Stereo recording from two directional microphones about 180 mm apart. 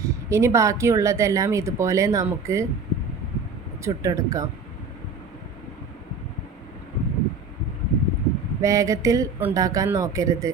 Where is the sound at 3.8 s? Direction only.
15° right (ahead or behind).